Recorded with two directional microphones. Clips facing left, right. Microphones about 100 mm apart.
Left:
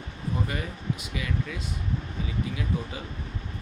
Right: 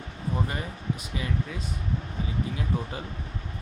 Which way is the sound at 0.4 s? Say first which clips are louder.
Even; 35° right (ahead or behind).